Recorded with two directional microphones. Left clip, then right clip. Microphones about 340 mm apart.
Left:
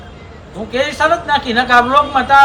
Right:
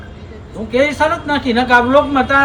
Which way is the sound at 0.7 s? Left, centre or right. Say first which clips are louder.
Even; centre.